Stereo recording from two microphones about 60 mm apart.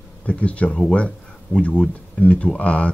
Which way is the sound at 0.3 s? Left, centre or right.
Left.